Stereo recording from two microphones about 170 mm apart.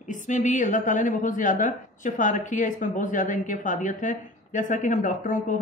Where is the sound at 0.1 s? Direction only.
45° left (ahead or behind).